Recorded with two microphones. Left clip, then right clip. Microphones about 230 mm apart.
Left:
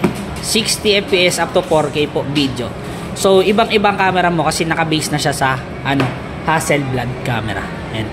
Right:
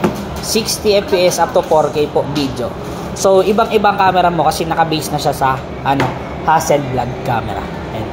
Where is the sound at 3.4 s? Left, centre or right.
Left.